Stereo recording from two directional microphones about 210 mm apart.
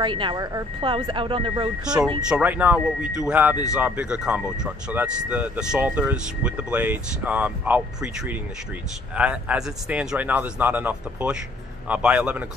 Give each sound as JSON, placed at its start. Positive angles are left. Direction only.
{"t": 0.0, "sound": "speech", "side_deg": -25}
{"t": 2.2, "sound": "speech", "side_deg": -5}